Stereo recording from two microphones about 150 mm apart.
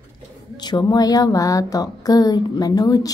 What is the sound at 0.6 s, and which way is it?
A woman's voice, 30° left (ahead or behind).